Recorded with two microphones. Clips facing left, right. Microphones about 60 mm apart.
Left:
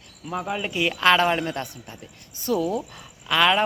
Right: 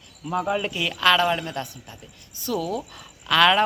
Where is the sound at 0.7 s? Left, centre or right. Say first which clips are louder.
Left 3 dB; left.